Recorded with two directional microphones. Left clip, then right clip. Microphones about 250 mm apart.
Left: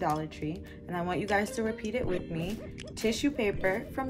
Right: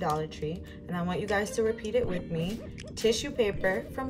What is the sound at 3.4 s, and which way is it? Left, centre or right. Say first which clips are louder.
Speech: right 2 dB; left.